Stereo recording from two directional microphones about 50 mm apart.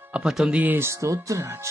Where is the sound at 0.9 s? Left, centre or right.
Right.